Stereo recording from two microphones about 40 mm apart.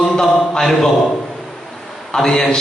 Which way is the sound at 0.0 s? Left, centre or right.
Centre.